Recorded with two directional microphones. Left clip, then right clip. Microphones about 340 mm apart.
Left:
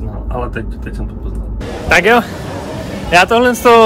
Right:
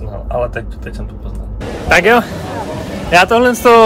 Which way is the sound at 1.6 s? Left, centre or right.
Centre.